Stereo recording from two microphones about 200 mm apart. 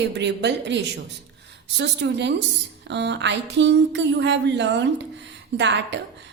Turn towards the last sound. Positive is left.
turn(degrees=-65)  # may be behind; listen again after turning